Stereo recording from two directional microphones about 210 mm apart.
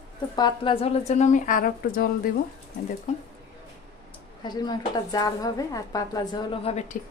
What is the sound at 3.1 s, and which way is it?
Speech, 35° left (ahead or behind).